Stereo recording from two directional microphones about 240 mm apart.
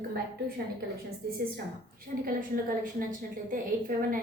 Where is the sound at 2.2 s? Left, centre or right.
Right.